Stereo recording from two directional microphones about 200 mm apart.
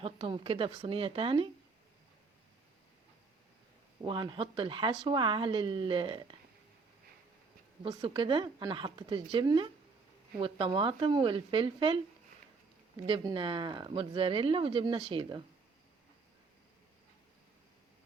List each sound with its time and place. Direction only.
0.0 s speech: 25° right (ahead or behind)
4.0 s speech: 25° right (ahead or behind)
7.9 s speech: 25° right (ahead or behind)
13.1 s speech: 25° right (ahead or behind)